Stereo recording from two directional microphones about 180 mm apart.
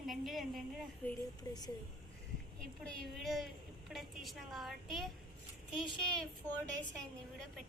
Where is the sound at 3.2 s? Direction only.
Centre (ahead or behind).